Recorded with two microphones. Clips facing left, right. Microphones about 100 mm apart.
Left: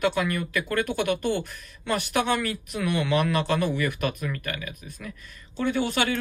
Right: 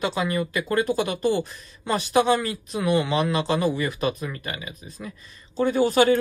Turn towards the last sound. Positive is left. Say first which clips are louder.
# right 6 dB
turn(degrees=-35)  # may be behind; listen again after turning